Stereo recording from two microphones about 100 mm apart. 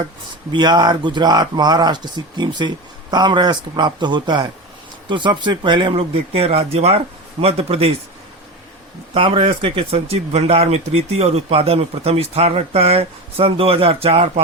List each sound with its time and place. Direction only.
0.5 s a man's voice: 45° right (ahead or behind); by 7.9 s 85° right
9.1 s speech: 65° right (ahead or behind)